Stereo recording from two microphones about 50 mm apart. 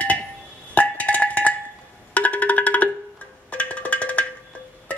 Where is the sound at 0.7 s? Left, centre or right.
Left.